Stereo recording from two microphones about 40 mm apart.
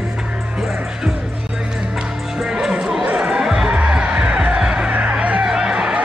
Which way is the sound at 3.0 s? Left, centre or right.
Right.